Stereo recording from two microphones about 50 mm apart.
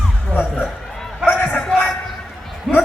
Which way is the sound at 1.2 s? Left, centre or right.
Left.